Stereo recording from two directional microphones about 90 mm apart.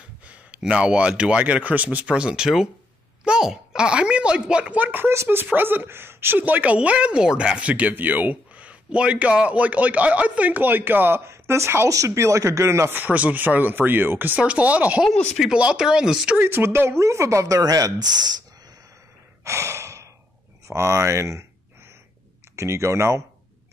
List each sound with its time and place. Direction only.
0.3 s speech: 10° right (ahead or behind)
15.0 s speech: centre (ahead or behind)
15.5 s speech: 10° right (ahead or behind)
16.3 s speech: 25° right (ahead or behind); by 18.4 s 50° right (ahead or behind)
19.4 s sigh: 30° right (ahead or behind)
20.6 s speech: 35° right (ahead or behind)
22.6 s speech: 30° right (ahead or behind)